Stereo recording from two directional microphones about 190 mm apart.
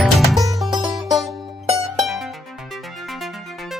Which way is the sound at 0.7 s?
20° right (ahead or behind).